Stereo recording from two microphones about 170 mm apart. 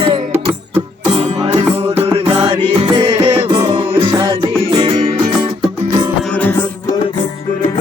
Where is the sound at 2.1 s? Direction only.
35° right (ahead or behind).